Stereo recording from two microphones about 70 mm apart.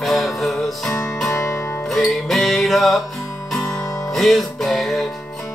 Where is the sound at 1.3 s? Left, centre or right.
Left.